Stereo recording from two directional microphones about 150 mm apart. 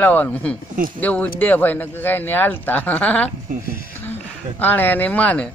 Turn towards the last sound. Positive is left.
turn(degrees=10)  # may be behind; listen again after turning